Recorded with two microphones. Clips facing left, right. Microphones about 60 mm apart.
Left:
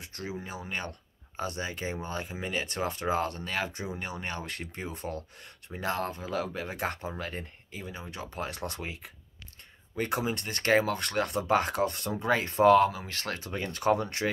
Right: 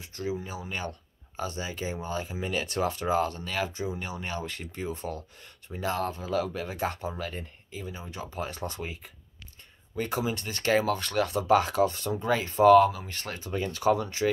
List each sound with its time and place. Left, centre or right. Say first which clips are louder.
0.0 s a sound: right 5 dB; left
0.7 s speech: right 1 dB; left
13.5 s speech: right 2 dB; left